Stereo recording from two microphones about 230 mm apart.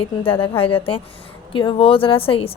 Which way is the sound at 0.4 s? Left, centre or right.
Left.